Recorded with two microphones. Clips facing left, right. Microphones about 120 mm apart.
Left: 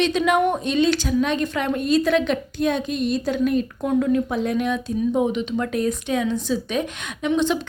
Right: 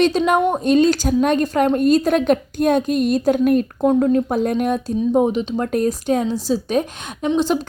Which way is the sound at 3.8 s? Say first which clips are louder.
Right 5 dB; 40° right (ahead or behind).